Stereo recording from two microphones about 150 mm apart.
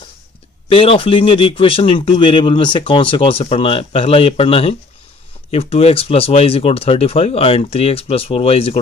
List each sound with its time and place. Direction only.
0.7 s speech: 40° left (ahead or behind)